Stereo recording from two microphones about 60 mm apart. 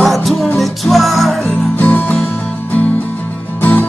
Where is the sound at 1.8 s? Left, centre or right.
Left.